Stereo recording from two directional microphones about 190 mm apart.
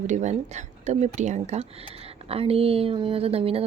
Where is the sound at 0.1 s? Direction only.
40° right (ahead or behind).